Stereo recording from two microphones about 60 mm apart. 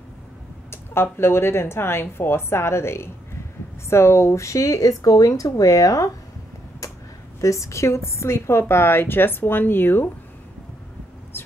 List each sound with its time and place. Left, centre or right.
0.7 s a woman's voice: left
7.3 s a woman's voice: left
11.3 s a sound: left